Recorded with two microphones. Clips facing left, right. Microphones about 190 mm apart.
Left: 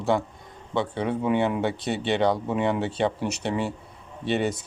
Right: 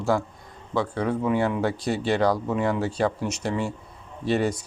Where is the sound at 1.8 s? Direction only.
Centre (ahead or behind).